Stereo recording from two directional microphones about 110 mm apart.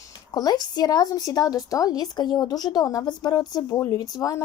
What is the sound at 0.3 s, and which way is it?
Speech, 35° left (ahead or behind).